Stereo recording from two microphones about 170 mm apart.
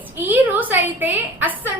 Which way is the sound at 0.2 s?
10° right (ahead or behind).